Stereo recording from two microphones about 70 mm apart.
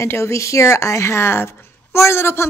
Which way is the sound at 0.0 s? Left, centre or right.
Left.